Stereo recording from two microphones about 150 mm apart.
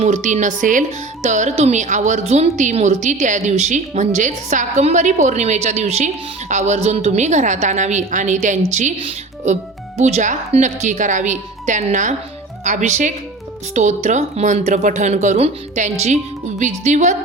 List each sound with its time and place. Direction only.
0.0 s speech: 55° right (ahead or behind)
10.0 s a woman's voice: 50° right (ahead or behind)